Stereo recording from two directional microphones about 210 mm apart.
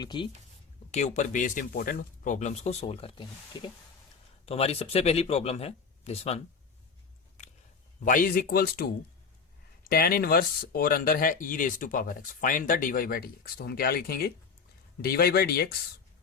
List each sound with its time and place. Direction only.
0.0 s speech: 20° left (ahead or behind)
0.9 s speech: 35° left (ahead or behind)
8.0 s speech: 40° left (ahead or behind)